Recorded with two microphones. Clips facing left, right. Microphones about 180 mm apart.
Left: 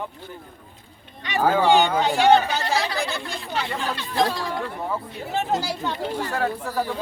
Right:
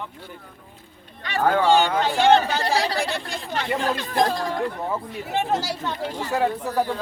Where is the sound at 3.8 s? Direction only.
45° right (ahead or behind).